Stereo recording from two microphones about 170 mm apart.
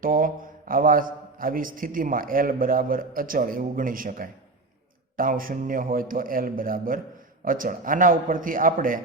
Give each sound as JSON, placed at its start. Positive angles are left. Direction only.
{"t": 0.0, "sound": "a man's voice", "side_deg": -55}